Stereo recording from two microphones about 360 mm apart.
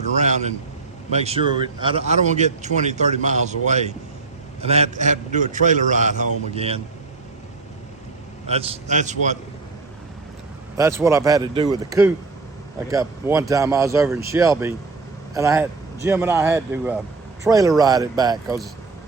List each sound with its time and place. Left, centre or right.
0.1 s a man's voice: centre
8.4 s speech: centre
10.8 s a man's voice: centre